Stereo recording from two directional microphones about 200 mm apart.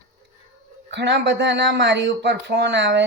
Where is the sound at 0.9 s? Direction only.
60° right (ahead or behind).